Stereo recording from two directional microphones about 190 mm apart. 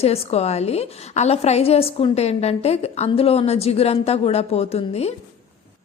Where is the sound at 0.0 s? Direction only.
30° left (ahead or behind).